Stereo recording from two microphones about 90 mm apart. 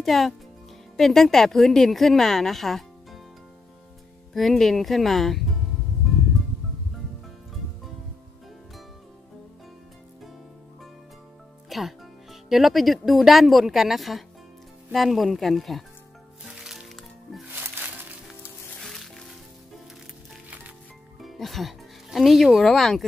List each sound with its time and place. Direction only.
0.0 s speech: centre (ahead or behind)
4.3 s speech: 5° left (ahead or behind)
11.7 s speech: centre (ahead or behind)
16.4 s music: 5° right (ahead or behind)
17.6 s music: 20° right (ahead or behind)
18.8 s music: centre (ahead or behind)
21.2 s speech: centre (ahead or behind)